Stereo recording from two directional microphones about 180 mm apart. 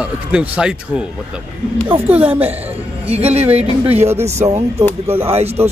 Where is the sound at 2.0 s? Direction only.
10° right (ahead or behind).